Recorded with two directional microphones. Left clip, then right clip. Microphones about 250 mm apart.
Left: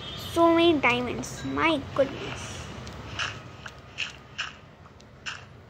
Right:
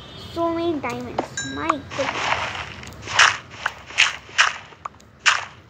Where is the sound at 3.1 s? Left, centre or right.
Right.